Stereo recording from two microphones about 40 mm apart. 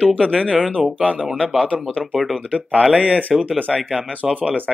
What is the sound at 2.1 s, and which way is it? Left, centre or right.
Speech, centre.